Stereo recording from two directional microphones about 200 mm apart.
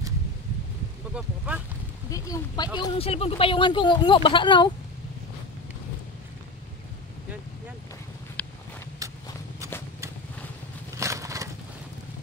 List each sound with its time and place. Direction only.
1.1 s speech: 5° right (ahead or behind)
2.0 s speech: 15° left (ahead or behind)
2.8 s speech: 30° left (ahead or behind)
8.4 s a sound: 5° left (ahead or behind)
9.0 s horse: 15° right (ahead or behind)
11.0 s crushing: 15° right (ahead or behind)